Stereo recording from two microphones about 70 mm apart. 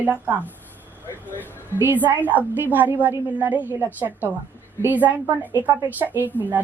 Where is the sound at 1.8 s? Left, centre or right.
Right.